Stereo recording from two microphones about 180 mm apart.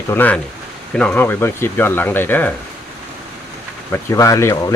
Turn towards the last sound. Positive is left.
turn(degrees=15)  # may be behind; listen again after turning